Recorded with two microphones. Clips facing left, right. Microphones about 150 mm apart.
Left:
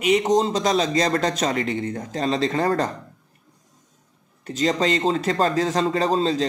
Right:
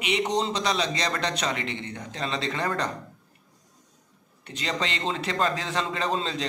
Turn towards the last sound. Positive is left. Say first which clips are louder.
# left 8 dB
turn(degrees=35)  # may be behind; listen again after turning